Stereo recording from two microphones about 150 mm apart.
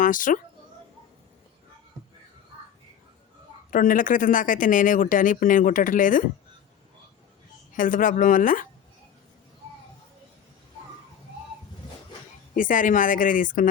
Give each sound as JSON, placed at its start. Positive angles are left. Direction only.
{"t": 0.0, "sound": "speech", "side_deg": 65}
{"t": 3.7, "sound": "speech", "side_deg": 60}
{"t": 7.7, "sound": "speech", "side_deg": 60}
{"t": 12.5, "sound": "speech", "side_deg": 60}